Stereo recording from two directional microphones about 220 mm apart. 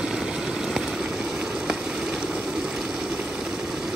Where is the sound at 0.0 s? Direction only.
5° right (ahead or behind).